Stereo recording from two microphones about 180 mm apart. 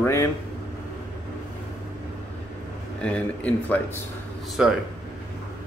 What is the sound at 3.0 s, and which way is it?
Speech, 5° left (ahead or behind).